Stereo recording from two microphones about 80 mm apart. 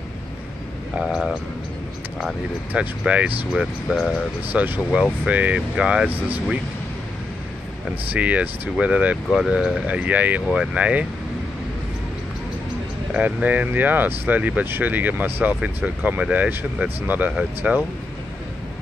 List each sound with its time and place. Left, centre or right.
1.0 s speech: centre
3.0 s speech: centre
4.5 s speech: right
8.1 s speech: centre
13.1 s speech: centre